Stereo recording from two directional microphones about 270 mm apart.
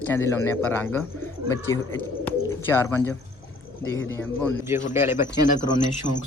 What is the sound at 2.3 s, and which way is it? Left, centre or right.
Bird, centre.